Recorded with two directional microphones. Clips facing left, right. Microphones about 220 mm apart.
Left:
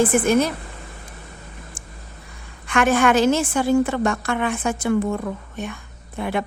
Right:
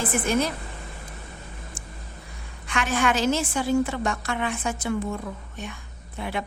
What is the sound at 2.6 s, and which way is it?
A woman's voice, 55° left (ahead or behind).